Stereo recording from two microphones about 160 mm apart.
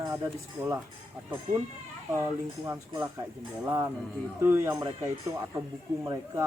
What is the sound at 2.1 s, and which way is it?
Speech, 15° right (ahead or behind).